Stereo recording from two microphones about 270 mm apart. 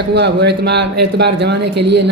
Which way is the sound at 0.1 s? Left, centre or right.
Right.